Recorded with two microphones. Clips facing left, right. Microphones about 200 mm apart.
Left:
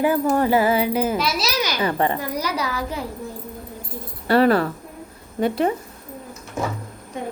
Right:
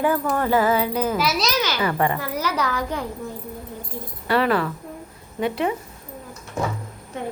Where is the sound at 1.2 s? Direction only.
5° right (ahead or behind).